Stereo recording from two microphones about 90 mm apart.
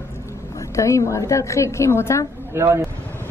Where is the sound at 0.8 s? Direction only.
35° left (ahead or behind).